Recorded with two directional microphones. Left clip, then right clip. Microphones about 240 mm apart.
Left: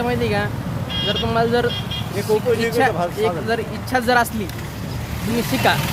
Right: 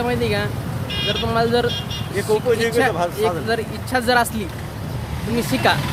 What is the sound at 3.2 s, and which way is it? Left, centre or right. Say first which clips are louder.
Speech: even; centre.